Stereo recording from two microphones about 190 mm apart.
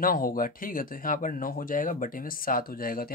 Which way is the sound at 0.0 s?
50° left (ahead or behind).